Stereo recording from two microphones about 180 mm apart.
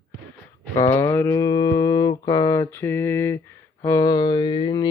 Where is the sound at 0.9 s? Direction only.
15° left (ahead or behind).